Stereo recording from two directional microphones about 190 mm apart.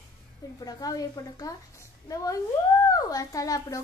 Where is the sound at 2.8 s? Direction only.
20° left (ahead or behind).